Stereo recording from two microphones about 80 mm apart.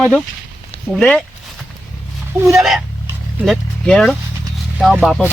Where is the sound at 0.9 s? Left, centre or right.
Centre.